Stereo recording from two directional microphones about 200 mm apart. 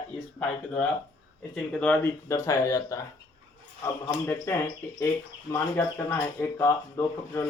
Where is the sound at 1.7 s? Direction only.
5° left (ahead or behind).